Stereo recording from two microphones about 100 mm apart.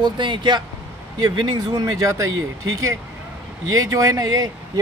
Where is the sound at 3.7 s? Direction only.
35° right (ahead or behind).